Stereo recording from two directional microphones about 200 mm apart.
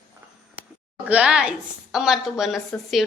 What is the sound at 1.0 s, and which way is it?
A woman's voice, 5° right (ahead or behind).